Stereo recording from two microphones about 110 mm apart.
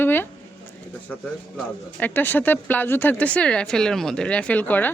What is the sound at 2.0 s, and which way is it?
A woman's voice, 15° left (ahead or behind).